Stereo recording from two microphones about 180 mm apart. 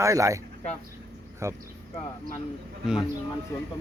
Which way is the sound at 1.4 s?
15° right (ahead or behind).